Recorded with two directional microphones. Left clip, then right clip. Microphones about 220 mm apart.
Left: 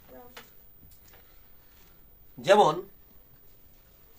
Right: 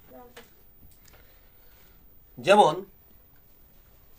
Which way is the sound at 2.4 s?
45° right (ahead or behind).